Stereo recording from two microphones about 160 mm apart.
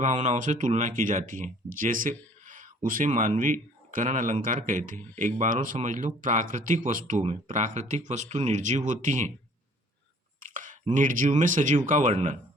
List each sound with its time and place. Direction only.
0.0 s speech: 50° right (ahead or behind)
10.4 s a sound: 55° right (ahead or behind)
10.9 s speech: 55° right (ahead or behind)